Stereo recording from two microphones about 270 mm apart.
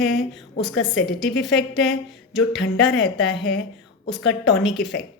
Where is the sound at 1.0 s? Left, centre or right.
Centre.